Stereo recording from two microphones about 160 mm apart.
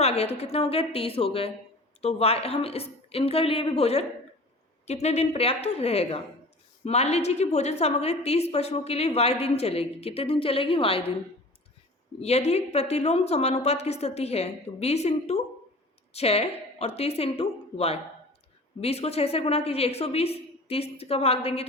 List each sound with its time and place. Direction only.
0.0 s a woman's voice: 40° left (ahead or behind)
12.2 s a woman's voice: 40° left (ahead or behind)